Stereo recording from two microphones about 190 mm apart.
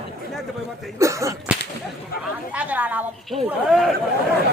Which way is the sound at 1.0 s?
15° right (ahead or behind).